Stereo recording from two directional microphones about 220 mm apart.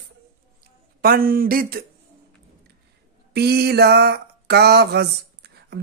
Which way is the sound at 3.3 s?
45° right (ahead or behind).